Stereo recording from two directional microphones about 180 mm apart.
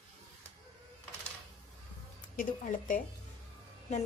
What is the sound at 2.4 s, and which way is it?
Speech, 50° left (ahead or behind).